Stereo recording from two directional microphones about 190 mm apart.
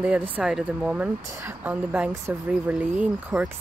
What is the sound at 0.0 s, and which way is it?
Speech, 5° right (ahead or behind).